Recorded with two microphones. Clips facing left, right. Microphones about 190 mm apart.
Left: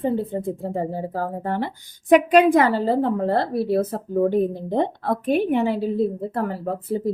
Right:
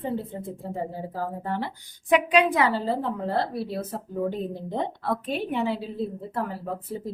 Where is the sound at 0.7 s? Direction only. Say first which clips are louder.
Left 3 dB; 60° left (ahead or behind).